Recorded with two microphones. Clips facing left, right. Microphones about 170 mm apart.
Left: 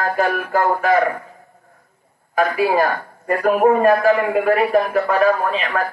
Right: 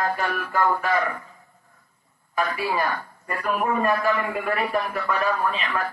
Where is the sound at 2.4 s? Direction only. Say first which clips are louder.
Left 8 dB; 55° left (ahead or behind).